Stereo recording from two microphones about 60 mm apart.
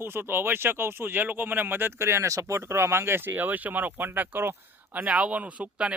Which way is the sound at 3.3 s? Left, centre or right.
Right.